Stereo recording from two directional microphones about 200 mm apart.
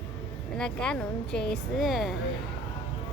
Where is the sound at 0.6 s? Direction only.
5° left (ahead or behind).